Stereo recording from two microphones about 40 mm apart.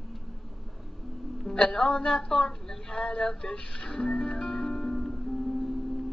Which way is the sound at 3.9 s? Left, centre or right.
Centre.